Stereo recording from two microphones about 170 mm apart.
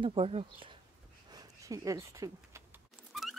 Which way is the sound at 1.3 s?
20° right (ahead or behind).